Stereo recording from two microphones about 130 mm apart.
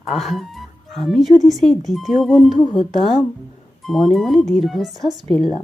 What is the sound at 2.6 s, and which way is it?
Speech, 40° left (ahead or behind).